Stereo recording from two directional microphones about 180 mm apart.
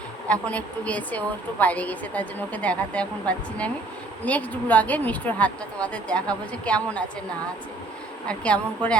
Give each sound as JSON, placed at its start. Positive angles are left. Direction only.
{"t": 0.3, "sound": "a woman's voice", "side_deg": 5}
{"t": 8.3, "sound": "a woman's voice", "side_deg": 5}